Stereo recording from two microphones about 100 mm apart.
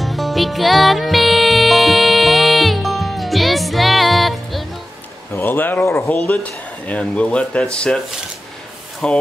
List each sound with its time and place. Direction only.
0.0 s music: centre (ahead or behind)
5.3 s speech: 20° left (ahead or behind)
6.1 s speech: 10° left (ahead or behind)
9.0 s speech: 10° left (ahead or behind)